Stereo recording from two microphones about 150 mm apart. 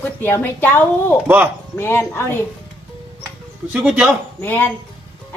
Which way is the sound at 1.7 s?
15° left (ahead or behind).